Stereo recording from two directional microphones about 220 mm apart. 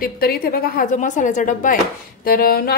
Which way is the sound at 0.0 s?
45° left (ahead or behind).